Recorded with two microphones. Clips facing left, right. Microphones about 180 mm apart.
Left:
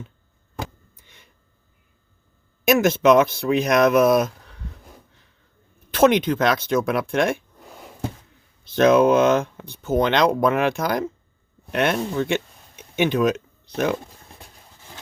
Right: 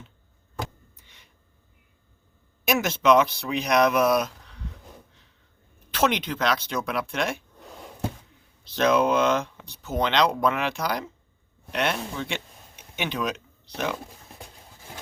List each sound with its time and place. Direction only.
2.6 s speech: 50° left (ahead or behind)
5.9 s speech: 50° left (ahead or behind)
7.6 s a sound: centre (ahead or behind)
8.6 s speech: 50° left (ahead or behind)